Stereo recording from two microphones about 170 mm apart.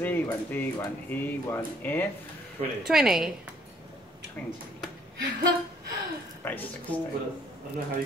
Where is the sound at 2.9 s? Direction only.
5° right (ahead or behind).